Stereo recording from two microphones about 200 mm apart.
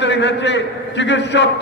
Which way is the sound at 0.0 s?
60° left (ahead or behind).